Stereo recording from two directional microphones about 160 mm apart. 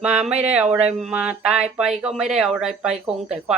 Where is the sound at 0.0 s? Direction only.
5° right (ahead or behind).